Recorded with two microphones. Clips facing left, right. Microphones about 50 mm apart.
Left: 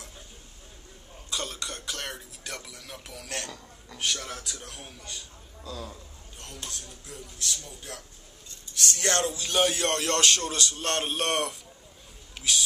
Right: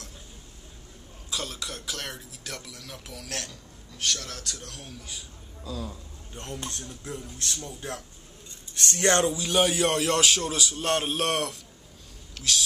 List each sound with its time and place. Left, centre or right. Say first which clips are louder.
1.3 s a man's voice: even; centre
5.0 s a man's voice: even; centre
6.3 s speech: right 5 dB; right
8.9 s speech: right 5 dB; right
9.2 s a man's voice: right 2 dB; centre